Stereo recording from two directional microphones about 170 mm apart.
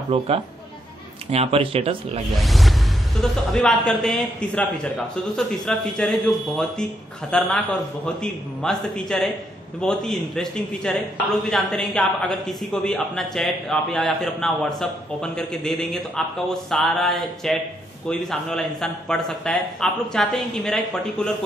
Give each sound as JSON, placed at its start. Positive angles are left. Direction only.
{"t": 0.1, "sound": "speech", "side_deg": -35}
{"t": 1.3, "sound": "speech", "side_deg": -35}
{"t": 2.3, "sound": "a woman's voice", "side_deg": 0}